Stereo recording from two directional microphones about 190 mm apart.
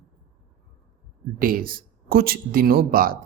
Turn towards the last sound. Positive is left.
turn(degrees=-50)  # may be behind; listen again after turning